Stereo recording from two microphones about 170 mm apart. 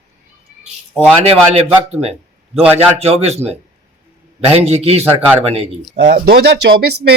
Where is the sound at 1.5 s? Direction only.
35° right (ahead or behind).